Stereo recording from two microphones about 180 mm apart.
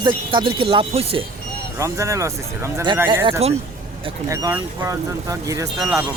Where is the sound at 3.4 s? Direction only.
35° right (ahead or behind).